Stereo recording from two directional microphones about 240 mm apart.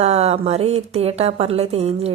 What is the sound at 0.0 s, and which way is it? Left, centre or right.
Speech, right.